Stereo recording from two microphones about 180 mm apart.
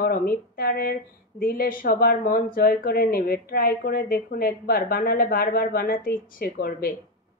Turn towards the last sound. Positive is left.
turn(degrees=55)  # may be behind; listen again after turning